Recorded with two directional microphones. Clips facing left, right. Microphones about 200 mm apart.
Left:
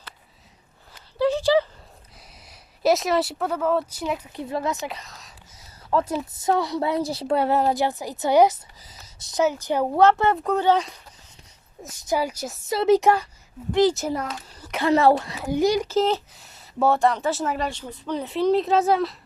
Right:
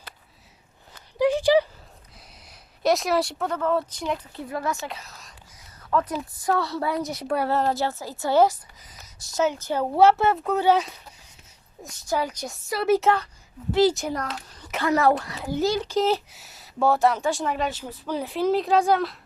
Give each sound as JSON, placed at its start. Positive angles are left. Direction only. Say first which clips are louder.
{"t": 1.2, "sound": "a sound", "louder": "right 1 dB", "side_deg": -15}
{"t": 2.5, "sound": "a woman's voice", "louder": "left 2 dB", "side_deg": 5}
{"t": 4.9, "sound": "speech", "louder": "left 2 dB", "side_deg": 0}
{"t": 5.9, "sound": "a woman's voice", "louder": "left 2 dB", "side_deg": 30}
{"t": 7.5, "sound": "a woman's voice", "louder": "left 2 dB", "side_deg": 15}
{"t": 8.8, "sound": "a sound", "louder": "left 1 dB", "side_deg": 30}
{"t": 9.3, "sound": "a woman's voice", "louder": "left 2 dB", "side_deg": 10}
{"t": 9.9, "sound": "speech", "louder": "right 1 dB", "side_deg": -10}
{"t": 12.0, "sound": "a woman's voice", "louder": "left 2 dB", "side_deg": 10}
{"t": 12.6, "sound": "a woman's voice", "louder": "left 3 dB", "side_deg": 20}
{"t": 13.7, "sound": "a child's voice", "louder": "left 1 dB", "side_deg": -5}
{"t": 14.8, "sound": "a woman's voice", "louder": "left 3 dB", "side_deg": 30}
{"t": 16.0, "sound": "speech", "louder": "even", "side_deg": -5}